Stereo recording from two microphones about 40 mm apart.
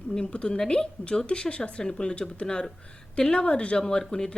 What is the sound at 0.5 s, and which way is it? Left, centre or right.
Speech, centre.